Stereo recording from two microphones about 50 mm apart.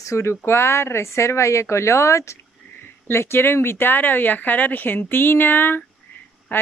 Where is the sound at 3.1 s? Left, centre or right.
Left.